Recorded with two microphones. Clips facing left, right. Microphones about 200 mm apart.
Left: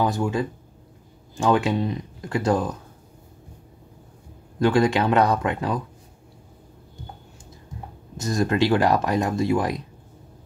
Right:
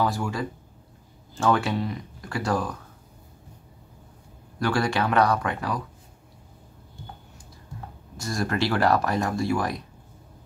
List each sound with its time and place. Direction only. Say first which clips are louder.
0.0 s speech: left 3 dB; 20° left (ahead or behind)
4.6 s speech: left 5 dB; 20° left (ahead or behind)
8.2 s speech: left 5 dB; 20° left (ahead or behind)